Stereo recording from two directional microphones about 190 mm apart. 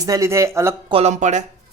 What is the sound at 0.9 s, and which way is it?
Speech, 35° right (ahead or behind).